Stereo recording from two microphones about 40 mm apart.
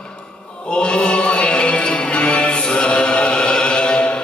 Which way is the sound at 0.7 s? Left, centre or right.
Left.